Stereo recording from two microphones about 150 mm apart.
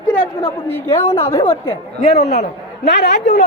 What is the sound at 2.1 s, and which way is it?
A woman's voice, 90° left.